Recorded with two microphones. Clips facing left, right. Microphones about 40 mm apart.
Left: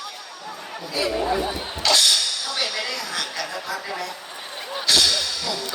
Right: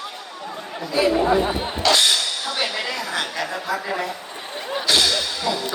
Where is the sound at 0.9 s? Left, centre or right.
Right.